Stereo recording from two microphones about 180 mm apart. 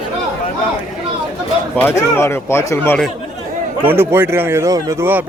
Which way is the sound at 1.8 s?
10° left (ahead or behind).